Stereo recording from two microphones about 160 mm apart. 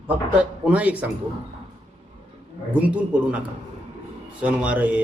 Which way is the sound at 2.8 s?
10° right (ahead or behind).